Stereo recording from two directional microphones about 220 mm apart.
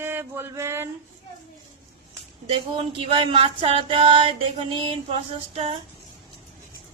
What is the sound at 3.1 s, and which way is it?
A woman's voice, 25° right (ahead or behind).